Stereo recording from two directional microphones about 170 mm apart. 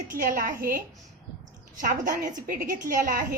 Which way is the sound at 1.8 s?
50° right (ahead or behind).